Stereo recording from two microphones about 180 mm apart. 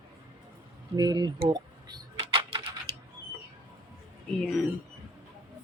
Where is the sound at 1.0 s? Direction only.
20° right (ahead or behind).